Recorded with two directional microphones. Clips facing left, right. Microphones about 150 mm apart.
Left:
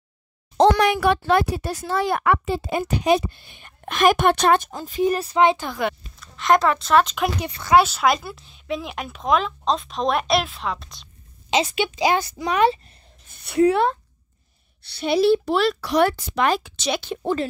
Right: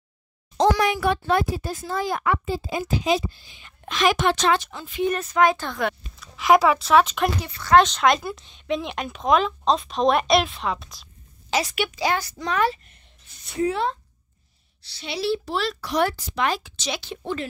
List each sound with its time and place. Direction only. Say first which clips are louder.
0.6 s speech: left 4 dB; 65° left (ahead or behind)
4.6 s speech: left 3 dB; 40° left (ahead or behind)
5.6 s speech: left 1 dB; 5° left (ahead or behind)
7.4 s speech: even; 15° left (ahead or behind); by 11.1 s centre (ahead or behind)
11.5 s speech: left 3 dB; 25° left (ahead or behind)
12.6 s speech: left 5 dB; 35° left (ahead or behind)
13.3 s speech: left 7 dB; 65° left (ahead or behind); by 17.5 s 40° left (ahead or behind)